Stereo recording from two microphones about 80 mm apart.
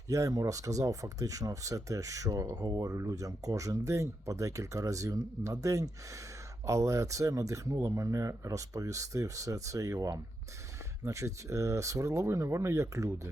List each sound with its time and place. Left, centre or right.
0.1 s speech: right